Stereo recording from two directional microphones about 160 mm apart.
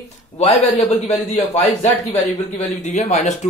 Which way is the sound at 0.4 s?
45° left (ahead or behind).